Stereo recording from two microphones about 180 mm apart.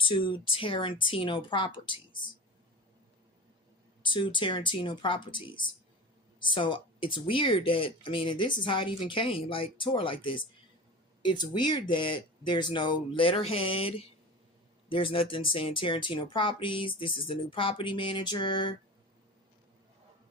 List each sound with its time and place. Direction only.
0.0 s speech: 25° left (ahead or behind)
4.0 s speech: 25° left (ahead or behind)